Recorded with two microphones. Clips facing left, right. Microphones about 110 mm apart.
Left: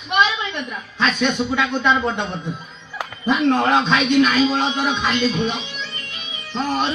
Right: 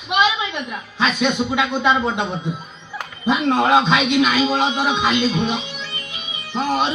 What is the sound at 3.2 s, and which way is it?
A man's voice, 15° right (ahead or behind).